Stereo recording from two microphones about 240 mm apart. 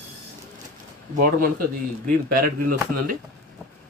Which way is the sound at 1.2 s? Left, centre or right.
Right.